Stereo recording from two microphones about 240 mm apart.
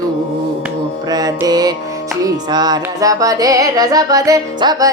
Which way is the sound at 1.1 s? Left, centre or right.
Centre.